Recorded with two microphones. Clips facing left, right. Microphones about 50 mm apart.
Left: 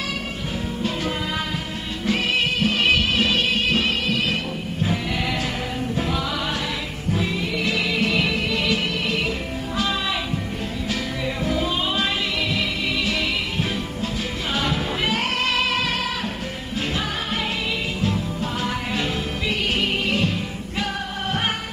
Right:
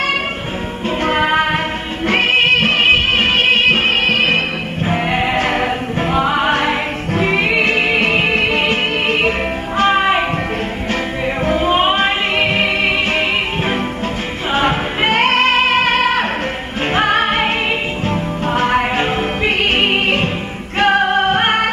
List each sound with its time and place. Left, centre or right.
1.0 s music: right
11.4 s music: right
20.8 s music: right